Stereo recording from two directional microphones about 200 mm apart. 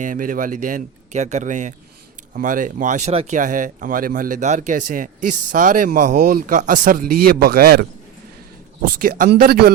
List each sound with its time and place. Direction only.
0.0 s a man's voice: 40° right (ahead or behind)
8.9 s a man's voice: 45° right (ahead or behind)